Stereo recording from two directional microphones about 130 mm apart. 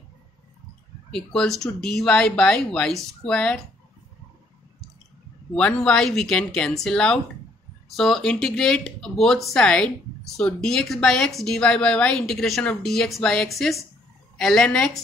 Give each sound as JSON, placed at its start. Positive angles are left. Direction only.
{"t": 1.1, "sound": "speech", "side_deg": 5}
{"t": 5.5, "sound": "a woman's voice", "side_deg": 10}